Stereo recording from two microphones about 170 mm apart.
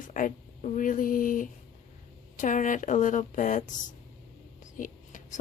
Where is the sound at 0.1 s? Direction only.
50° left (ahead or behind).